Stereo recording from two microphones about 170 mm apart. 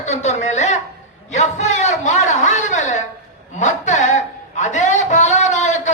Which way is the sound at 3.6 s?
45° left (ahead or behind).